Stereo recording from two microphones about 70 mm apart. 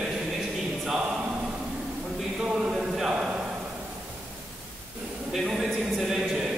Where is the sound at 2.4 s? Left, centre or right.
Centre.